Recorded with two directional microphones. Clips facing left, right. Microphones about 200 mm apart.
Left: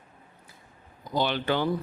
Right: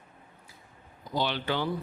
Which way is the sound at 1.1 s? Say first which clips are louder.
Left 3 dB; 50° left (ahead or behind).